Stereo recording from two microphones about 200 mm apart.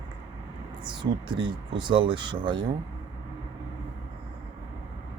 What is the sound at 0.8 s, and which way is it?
Speech, 20° right (ahead or behind).